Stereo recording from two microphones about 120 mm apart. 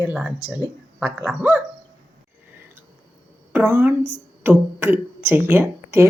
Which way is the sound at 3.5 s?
15° right (ahead or behind).